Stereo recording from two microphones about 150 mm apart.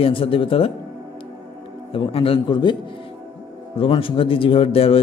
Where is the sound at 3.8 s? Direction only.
35° left (ahead or behind).